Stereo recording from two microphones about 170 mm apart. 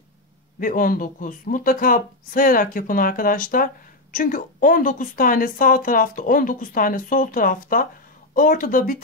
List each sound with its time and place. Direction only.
0.6 s speech: 55° left (ahead or behind)